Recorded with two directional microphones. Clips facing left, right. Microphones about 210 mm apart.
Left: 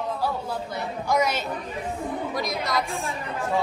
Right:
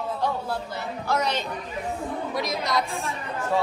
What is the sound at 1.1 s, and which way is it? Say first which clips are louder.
A woman's voice: left 2 dB; 10° left (ahead or behind).